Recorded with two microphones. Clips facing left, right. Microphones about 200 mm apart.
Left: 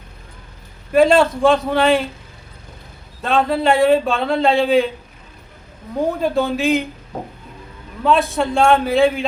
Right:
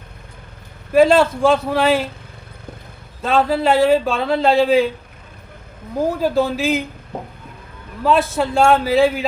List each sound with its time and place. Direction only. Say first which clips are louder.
0.9 s a man's voice: even; centre (ahead or behind)
3.2 s a man's voice: right 1 dB; centre (ahead or behind)
6.0 s a man's voice: right 1 dB; centre (ahead or behind)
8.0 s a man's voice: even; centre (ahead or behind)